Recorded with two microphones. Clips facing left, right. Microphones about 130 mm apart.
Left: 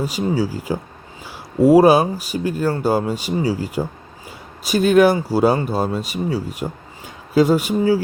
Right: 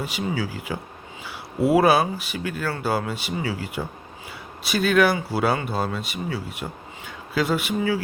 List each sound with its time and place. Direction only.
0.0 s speech: 40° left (ahead or behind)